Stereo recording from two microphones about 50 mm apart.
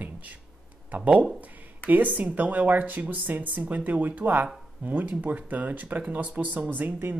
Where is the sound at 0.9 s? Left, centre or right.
Right.